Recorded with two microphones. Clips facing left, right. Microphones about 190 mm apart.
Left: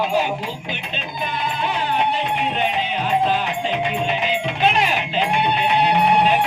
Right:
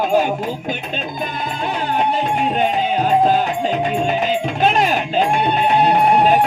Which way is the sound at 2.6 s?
40° right (ahead or behind).